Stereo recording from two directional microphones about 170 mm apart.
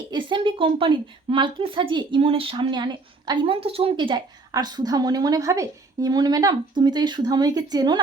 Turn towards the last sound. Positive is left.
turn(degrees=-25)  # may be behind; listen again after turning